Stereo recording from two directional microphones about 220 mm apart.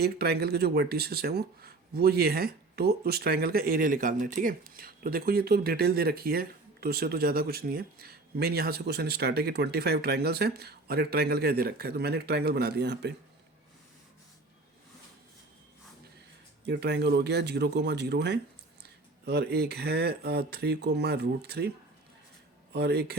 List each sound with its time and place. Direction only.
0.0 s speech: 45° right (ahead or behind)
16.6 s speech: 50° right (ahead or behind)
22.7 s speech: 50° right (ahead or behind)